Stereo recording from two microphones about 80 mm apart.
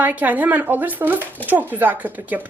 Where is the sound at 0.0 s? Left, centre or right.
Right.